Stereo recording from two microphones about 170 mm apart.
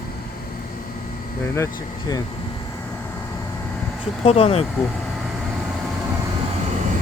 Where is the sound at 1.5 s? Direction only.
20° left (ahead or behind).